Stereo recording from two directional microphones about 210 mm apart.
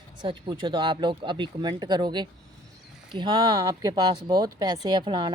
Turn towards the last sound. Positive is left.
turn(degrees=-20)  # may be behind; listen again after turning